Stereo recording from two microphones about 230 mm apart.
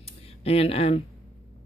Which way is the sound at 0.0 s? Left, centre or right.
Left.